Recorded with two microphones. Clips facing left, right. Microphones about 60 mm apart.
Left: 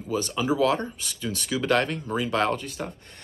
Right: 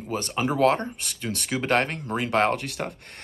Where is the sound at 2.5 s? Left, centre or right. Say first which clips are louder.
Right 2 dB; right.